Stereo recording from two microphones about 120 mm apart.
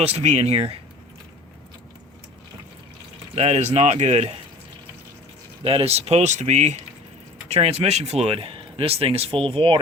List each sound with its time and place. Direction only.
0.0 s speech: 65° right (ahead or behind)
3.3 s speech: 65° right (ahead or behind)
5.6 s speech: 55° right (ahead or behind); by 6.7 s 75° right (ahead or behind)
7.4 s speech: 60° right (ahead or behind)